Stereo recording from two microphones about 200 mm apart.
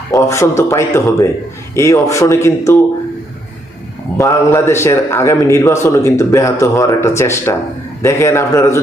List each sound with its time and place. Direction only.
0.1 s a man's voice: 15° left (ahead or behind)
4.2 s a man's voice: 15° left (ahead or behind)